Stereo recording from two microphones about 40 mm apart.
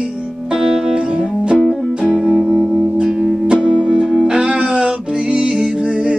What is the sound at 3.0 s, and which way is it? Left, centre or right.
Music, centre.